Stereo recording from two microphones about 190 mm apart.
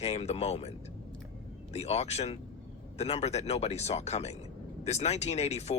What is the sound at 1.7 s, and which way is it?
Speech, 35° left (ahead or behind).